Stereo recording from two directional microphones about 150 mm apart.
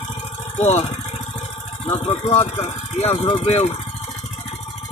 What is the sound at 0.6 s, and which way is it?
Speech, 50° left (ahead or behind).